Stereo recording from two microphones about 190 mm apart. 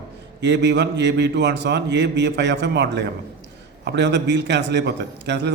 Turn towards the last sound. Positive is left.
turn(degrees=-65)  # may be behind; listen again after turning